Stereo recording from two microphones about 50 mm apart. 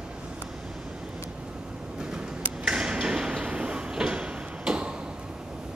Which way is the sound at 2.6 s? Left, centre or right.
Centre.